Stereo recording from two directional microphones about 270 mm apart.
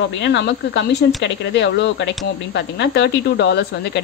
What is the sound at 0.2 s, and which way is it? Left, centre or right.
Speech, left.